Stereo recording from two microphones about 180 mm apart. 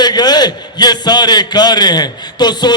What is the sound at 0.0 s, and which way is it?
A man's voice, 25° left (ahead or behind).